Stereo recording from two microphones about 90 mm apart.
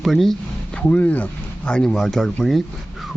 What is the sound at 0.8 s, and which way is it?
Speech, 15° left (ahead or behind).